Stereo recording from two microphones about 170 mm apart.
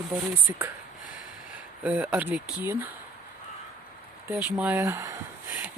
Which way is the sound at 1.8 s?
10° right (ahead or behind).